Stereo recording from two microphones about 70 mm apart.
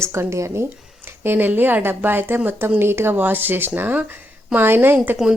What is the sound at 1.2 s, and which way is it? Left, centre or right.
Speech, right.